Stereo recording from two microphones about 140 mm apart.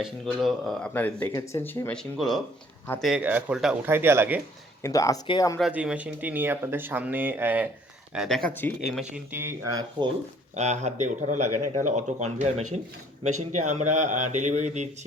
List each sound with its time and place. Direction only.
0.0 s speech: centre (ahead or behind)
0.9 s speech: 15° left (ahead or behind); by 3.8 s 5° right (ahead or behind)
3.8 s speech: 15° right (ahead or behind)
4.8 s speech: 25° left (ahead or behind)
5.5 s speech: 5° right (ahead or behind)
8.1 s speech: centre (ahead or behind)
8.5 s speech: 15° left (ahead or behind)
9.0 s speech: 10° right (ahead or behind)
10.5 s speech: 55° right (ahead or behind)